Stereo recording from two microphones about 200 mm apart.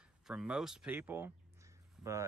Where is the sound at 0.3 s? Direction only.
5° right (ahead or behind).